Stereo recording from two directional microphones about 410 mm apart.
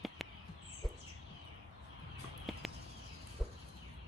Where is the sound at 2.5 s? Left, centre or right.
Centre.